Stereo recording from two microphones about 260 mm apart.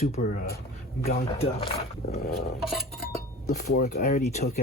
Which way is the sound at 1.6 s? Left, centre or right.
Left.